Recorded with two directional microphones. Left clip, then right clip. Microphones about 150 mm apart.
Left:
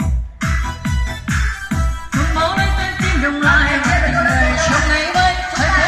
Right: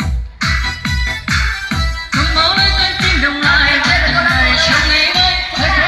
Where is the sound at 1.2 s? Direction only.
70° left (ahead or behind).